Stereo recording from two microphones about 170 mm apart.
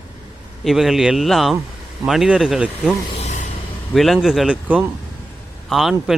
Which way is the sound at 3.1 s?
45° left (ahead or behind).